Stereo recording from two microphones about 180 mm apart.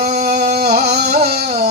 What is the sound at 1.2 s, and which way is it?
Music, 60° right (ahead or behind).